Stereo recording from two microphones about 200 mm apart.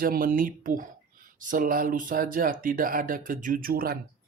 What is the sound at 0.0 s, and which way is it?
Speech, 45° right (ahead or behind).